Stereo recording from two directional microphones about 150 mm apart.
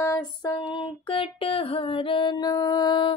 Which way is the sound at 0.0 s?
25° left (ahead or behind).